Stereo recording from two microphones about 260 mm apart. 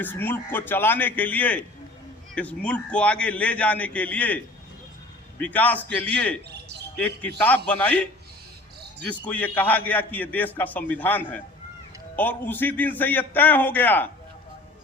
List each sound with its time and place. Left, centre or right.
0.0 s a man's voice: centre
5.4 s a man's voice: centre